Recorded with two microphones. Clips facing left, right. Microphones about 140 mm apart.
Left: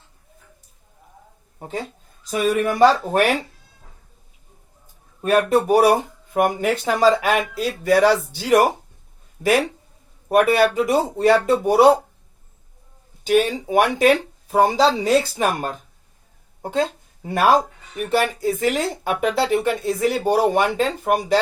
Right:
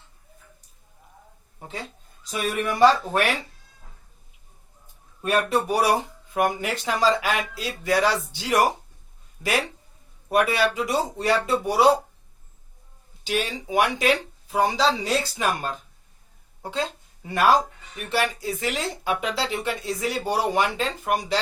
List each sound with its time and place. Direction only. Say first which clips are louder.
1.5 s speech: left 7 dB; 45° left (ahead or behind)
5.2 s speech: left 6 dB; 45° left (ahead or behind)
10.2 s speech: left 6 dB; 50° left (ahead or behind)
13.2 s speech: left 9 dB; 45° left (ahead or behind)